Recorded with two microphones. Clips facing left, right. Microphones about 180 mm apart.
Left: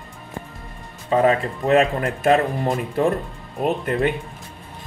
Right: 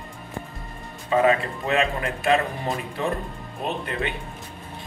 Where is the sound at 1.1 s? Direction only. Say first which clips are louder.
Left 2 dB; 35° left (ahead or behind).